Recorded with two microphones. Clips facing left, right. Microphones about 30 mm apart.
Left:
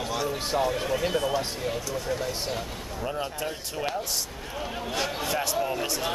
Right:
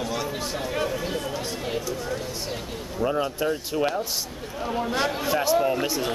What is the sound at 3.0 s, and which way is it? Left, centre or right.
Speech, centre.